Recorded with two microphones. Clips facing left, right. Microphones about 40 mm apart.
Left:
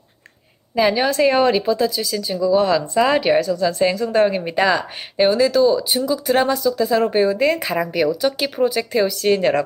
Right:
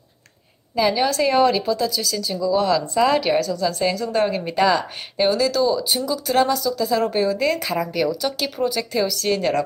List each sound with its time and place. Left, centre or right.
0.8 s speech: centre